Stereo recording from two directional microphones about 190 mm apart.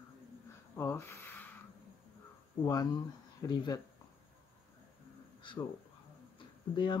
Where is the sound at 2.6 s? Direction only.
20° left (ahead or behind).